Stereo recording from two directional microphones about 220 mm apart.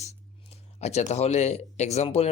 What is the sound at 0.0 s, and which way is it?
Speech, 30° left (ahead or behind).